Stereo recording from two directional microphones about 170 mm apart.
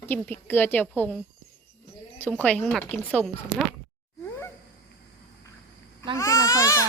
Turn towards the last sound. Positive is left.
turn(degrees=20)  # may be behind; listen again after turning